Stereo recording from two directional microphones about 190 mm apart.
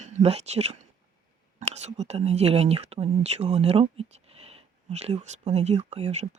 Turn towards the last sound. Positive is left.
turn(degrees=-35)  # may be behind; listen again after turning